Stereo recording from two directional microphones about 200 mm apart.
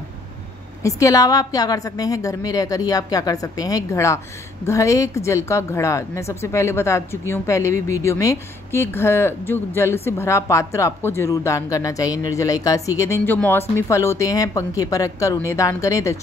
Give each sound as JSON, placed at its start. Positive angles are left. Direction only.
{"t": 0.8, "sound": "a woman's voice", "side_deg": 15}